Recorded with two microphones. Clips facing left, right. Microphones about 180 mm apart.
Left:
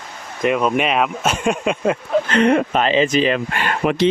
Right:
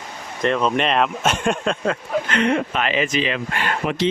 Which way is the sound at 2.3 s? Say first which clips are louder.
Left 5 dB; 45° left (ahead or behind).